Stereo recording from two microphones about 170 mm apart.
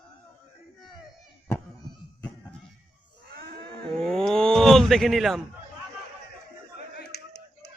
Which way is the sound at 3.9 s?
5° left (ahead or behind).